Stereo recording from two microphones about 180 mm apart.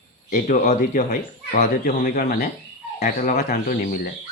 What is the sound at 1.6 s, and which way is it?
Speech, 55° left (ahead or behind).